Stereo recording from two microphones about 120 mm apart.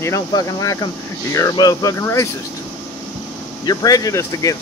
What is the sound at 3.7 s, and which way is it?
Speech, 35° left (ahead or behind).